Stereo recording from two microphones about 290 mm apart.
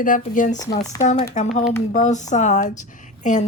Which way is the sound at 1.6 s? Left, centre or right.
Left.